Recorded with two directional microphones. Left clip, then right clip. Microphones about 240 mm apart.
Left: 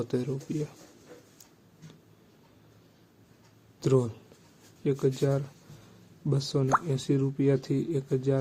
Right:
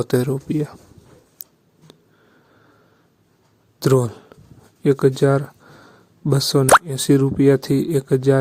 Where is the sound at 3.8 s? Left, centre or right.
Right.